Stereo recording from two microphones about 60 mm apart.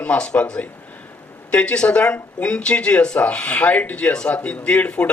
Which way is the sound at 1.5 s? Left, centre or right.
Centre.